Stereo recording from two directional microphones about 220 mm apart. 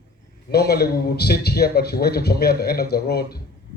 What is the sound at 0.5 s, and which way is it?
A man's voice, 45° left (ahead or behind).